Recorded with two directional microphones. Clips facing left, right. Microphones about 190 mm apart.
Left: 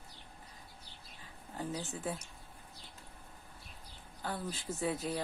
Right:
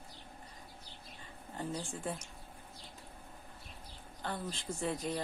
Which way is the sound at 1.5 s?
5° left (ahead or behind).